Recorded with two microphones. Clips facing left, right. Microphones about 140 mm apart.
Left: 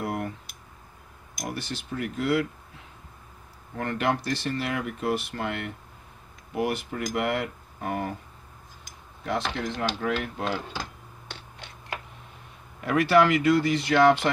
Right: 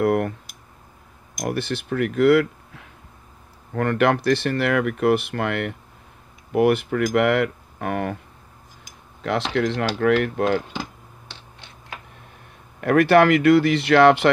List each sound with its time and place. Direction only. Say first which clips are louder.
0.0 s clicking: right 11 dB; 60° right (ahead or behind)
1.4 s speech: right 8 dB; 60° right (ahead or behind)
9.2 s speech: right 7 dB; 80° right
9.9 s speech: right 10 dB; 70° right (ahead or behind)
12.8 s speech: right 5 dB; 55° right (ahead or behind)